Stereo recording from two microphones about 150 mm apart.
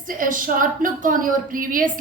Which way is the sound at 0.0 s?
65° right (ahead or behind).